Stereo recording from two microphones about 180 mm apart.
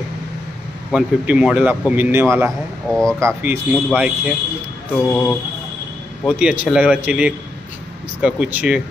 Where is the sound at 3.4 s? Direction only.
5° right (ahead or behind).